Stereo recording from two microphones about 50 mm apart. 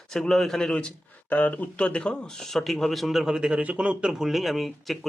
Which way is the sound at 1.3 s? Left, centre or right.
Left.